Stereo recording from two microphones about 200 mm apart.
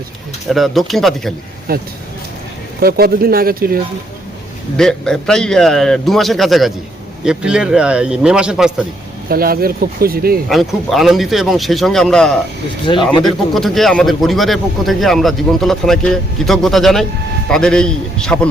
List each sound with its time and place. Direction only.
0.5 s speech: centre (ahead or behind)
1.7 s speech: 50° right (ahead or behind)
4.8 s speech: 5° left (ahead or behind)
9.3 s speech: 50° right (ahead or behind)
10.5 s speech: centre (ahead or behind)